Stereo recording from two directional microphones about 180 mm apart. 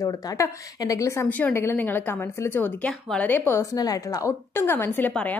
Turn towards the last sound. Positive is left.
turn(degrees=10)  # may be behind; listen again after turning